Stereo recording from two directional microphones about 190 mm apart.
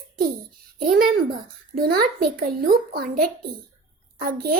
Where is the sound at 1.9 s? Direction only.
55° right (ahead or behind).